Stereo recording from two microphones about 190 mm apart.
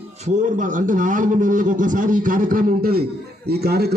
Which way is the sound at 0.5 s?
40° right (ahead or behind).